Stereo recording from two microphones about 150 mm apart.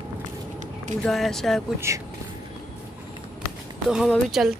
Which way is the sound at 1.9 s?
20° right (ahead or behind).